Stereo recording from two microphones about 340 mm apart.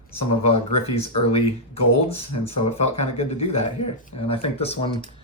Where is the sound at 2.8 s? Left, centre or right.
Centre.